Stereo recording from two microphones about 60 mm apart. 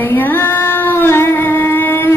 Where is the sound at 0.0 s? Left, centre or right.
Left.